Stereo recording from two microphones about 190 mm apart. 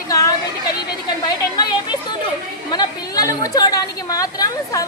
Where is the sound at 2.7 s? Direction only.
20° left (ahead or behind).